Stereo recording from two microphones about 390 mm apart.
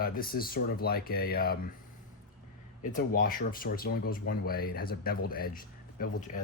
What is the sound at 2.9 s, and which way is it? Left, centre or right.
Speech, left.